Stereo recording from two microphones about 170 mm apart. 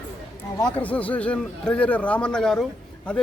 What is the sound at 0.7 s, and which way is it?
A man's voice, 10° left (ahead or behind).